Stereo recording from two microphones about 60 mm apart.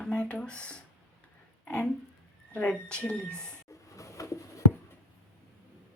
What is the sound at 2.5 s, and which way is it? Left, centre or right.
A woman's voice, centre.